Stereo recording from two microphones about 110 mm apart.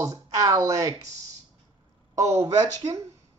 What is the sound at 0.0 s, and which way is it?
Speech, 30° right (ahead or behind).